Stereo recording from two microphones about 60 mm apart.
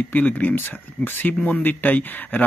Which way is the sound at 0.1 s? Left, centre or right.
Left.